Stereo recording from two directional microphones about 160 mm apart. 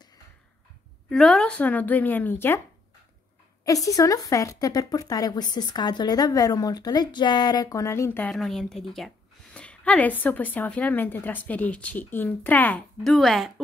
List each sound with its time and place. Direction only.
1.0 s a woman's voice: centre (ahead or behind)
3.6 s a woman's voice: 20° left (ahead or behind)
8.3 s a woman's voice: centre (ahead or behind)